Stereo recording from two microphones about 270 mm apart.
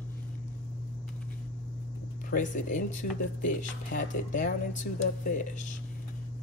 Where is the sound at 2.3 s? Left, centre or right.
Left.